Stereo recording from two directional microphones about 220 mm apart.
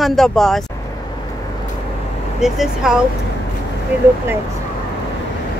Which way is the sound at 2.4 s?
Centre (ahead or behind).